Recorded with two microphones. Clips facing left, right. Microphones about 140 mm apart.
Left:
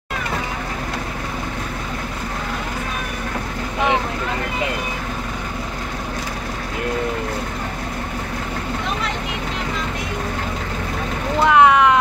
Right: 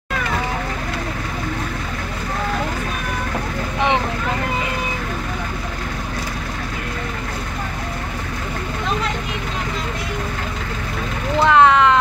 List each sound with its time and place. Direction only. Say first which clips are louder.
11.4 s vehicle: even; 10° left (ahead or behind)